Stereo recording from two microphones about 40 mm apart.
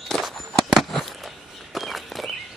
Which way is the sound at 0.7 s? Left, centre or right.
Centre.